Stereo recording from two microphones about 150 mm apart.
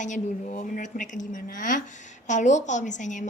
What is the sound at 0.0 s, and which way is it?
A woman's voice, 55° left (ahead or behind).